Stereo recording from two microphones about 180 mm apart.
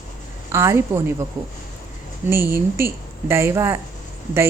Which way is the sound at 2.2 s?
15° right (ahead or behind).